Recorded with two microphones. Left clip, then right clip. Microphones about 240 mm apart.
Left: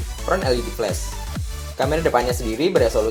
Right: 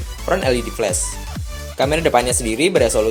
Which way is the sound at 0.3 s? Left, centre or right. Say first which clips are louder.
Right 3 dB; right.